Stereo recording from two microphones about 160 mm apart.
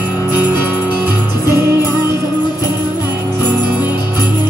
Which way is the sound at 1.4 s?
15° right (ahead or behind).